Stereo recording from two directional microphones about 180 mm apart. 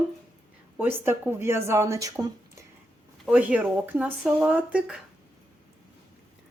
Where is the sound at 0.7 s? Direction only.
10° right (ahead or behind).